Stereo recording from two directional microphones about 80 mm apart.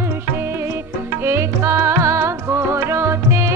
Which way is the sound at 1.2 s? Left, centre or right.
Right.